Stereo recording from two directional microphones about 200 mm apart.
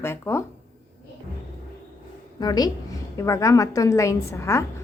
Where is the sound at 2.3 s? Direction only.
20° left (ahead or behind).